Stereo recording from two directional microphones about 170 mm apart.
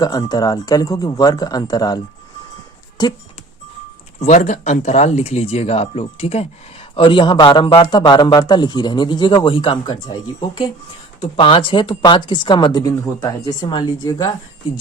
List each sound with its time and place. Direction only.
0.0 s a man's voice: 20° left (ahead or behind)
4.2 s a man's voice: 45° left (ahead or behind); by 14.3 s 20° left (ahead or behind)